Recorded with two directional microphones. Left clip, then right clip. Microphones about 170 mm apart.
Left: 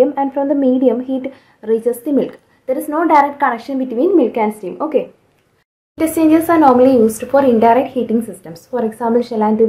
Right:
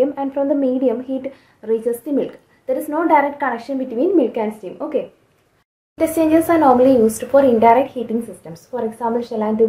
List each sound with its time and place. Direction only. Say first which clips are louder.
0.0 s speech: left 4 dB; 20° left (ahead or behind)
5.9 s speech: left 2 dB; 30° left (ahead or behind)